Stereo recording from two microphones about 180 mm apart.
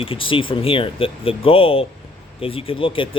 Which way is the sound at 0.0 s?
30° left (ahead or behind).